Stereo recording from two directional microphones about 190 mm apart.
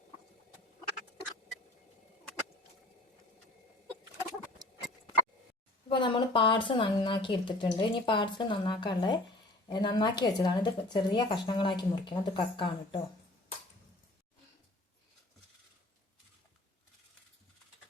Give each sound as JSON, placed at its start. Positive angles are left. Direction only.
{"t": 5.9, "sound": "speech", "side_deg": 25}